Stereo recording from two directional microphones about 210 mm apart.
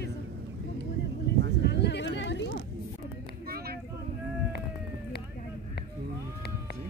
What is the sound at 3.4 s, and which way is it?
Vehicle, 45° right (ahead or behind).